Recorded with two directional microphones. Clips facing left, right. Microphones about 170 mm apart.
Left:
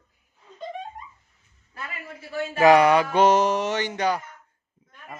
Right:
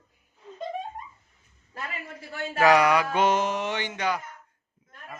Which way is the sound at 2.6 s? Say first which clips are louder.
Left 4 dB; 25° left (ahead or behind).